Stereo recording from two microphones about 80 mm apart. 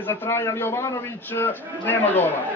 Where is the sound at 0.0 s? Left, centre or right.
Left.